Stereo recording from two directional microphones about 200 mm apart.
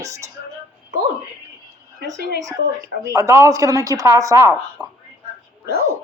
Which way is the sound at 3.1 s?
10° right (ahead or behind).